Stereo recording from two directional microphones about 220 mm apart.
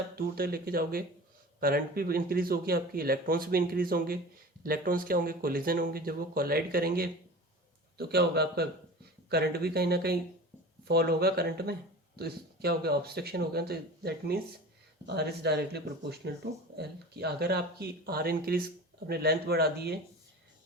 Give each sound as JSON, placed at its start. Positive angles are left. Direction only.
{"t": 0.2, "sound": "speech", "side_deg": -45}